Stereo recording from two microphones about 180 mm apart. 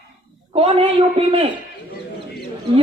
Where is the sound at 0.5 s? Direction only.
30° right (ahead or behind).